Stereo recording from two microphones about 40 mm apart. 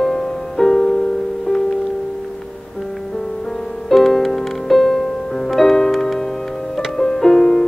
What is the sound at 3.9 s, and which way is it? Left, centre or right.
Music, centre.